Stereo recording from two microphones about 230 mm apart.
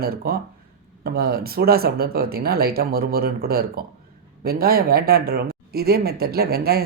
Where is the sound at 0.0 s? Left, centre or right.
Right.